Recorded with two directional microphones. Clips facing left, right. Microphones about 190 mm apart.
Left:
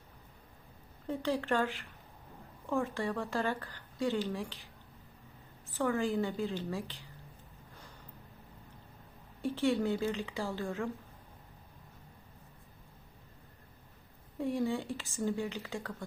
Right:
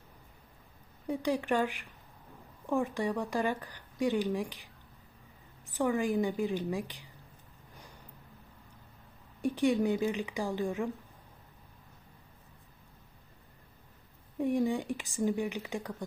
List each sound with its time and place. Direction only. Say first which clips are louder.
1.0 s speech: right 2 dB; 15° right (ahead or behind)
9.4 s speech: right 3 dB; 15° right (ahead or behind)
14.3 s speech: right 3 dB; 15° right (ahead or behind)